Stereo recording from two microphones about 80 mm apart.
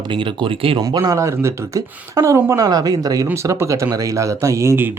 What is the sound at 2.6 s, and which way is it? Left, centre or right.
Speech, right.